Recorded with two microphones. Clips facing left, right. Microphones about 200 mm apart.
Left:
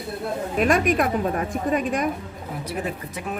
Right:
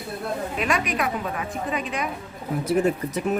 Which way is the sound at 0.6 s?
45° left (ahead or behind).